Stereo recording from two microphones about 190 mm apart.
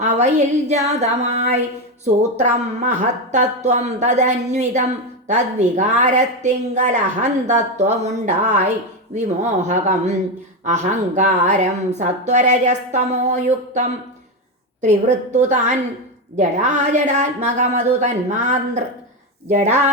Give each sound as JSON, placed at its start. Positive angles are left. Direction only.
{"t": 0.0, "sound": "a woman's voice", "side_deg": -40}